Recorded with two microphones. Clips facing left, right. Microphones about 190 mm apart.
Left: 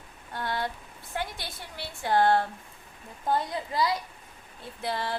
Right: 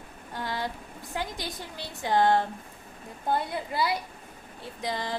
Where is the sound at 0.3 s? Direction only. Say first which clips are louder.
Left 1 dB; 15° right (ahead or behind).